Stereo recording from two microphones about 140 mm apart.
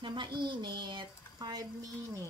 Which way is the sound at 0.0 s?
35° right (ahead or behind).